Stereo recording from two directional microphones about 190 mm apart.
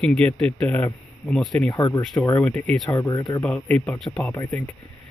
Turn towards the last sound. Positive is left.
turn(degrees=10)  # may be behind; listen again after turning